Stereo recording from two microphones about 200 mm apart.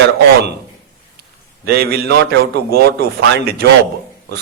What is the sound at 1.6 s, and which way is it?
A man's voice, 50° right (ahead or behind).